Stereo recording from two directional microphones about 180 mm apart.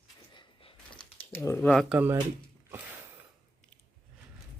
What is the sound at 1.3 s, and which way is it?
Speech, 15° left (ahead or behind).